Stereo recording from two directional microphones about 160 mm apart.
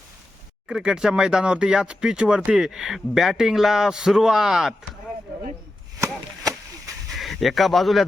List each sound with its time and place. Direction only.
0.7 s speech: 5° right (ahead or behind)
6.0 s chop: 20° right (ahead or behind)
7.1 s speech: centre (ahead or behind)